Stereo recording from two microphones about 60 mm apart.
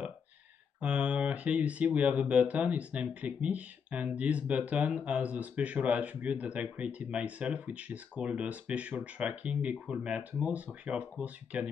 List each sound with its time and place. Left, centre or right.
0.7 s speech: right